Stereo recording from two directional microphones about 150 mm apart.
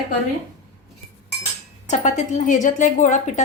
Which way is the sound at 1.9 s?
55° left (ahead or behind).